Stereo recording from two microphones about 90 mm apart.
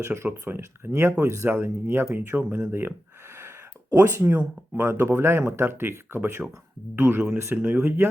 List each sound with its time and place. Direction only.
0.0 s speech: 25° right (ahead or behind)
3.3 s a sound: 30° right (ahead or behind)
4.8 s speech: 25° right (ahead or behind)
7.6 s speech: 15° right (ahead or behind)